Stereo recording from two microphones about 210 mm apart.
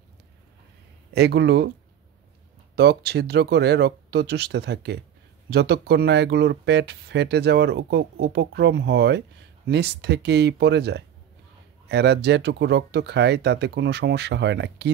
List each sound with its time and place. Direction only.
1.1 s speech: 55° right (ahead or behind)
2.7 s speech: 50° right (ahead or behind)